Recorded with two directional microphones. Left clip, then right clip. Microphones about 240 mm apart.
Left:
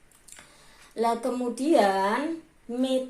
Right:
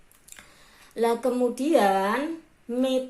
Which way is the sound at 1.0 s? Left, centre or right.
Right.